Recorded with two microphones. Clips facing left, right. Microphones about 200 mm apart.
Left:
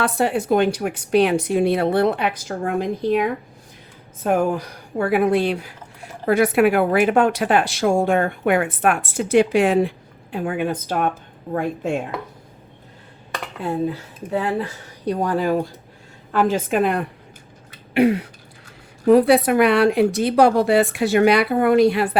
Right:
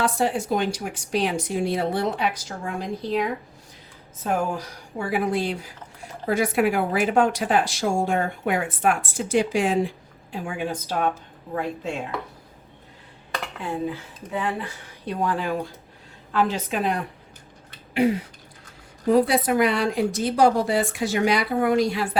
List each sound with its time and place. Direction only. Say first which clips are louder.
0.0 s a woman's voice: left 3 dB; 60° left (ahead or behind)
13.6 s a woman's voice: left 6 dB; 40° left (ahead or behind); by 22.2 s 60° left (ahead or behind)